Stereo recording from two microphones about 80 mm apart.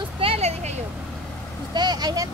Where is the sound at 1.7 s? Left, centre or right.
Right.